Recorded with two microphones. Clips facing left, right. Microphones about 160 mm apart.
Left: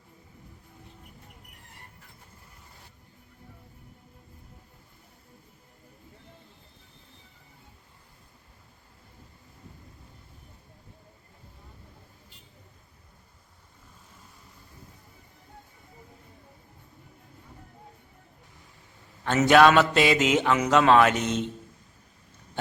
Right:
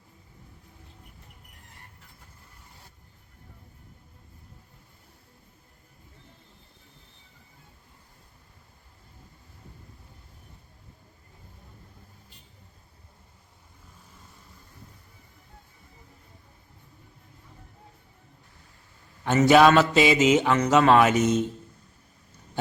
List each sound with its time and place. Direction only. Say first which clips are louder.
19.4 s music: right 1 dB; 5° right (ahead or behind)
21.2 s a man's voice: right 5 dB; 45° right (ahead or behind)